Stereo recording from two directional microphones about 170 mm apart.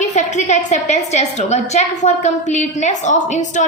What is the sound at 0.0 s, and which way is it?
A woman's voice, 45° left (ahead or behind).